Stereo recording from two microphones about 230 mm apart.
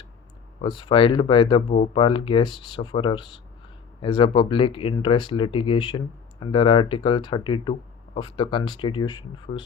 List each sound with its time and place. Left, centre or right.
0.6 s speech: left